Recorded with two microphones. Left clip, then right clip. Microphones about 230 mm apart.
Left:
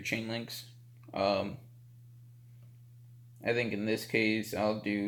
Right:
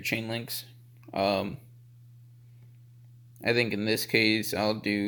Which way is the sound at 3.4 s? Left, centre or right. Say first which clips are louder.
Right 5 dB; right.